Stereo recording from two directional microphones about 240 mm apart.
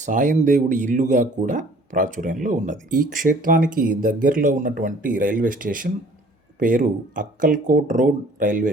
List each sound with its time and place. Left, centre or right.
0.0 s speech: right